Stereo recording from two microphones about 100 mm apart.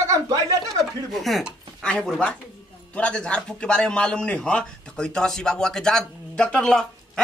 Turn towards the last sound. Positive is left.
turn(degrees=5)  # may be behind; listen again after turning